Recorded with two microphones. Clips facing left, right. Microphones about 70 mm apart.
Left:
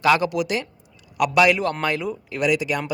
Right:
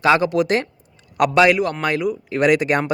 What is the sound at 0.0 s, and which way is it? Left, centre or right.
Speech, right.